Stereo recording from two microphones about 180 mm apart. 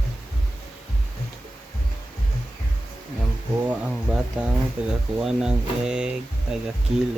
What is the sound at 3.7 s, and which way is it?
Speech, 5° right (ahead or behind).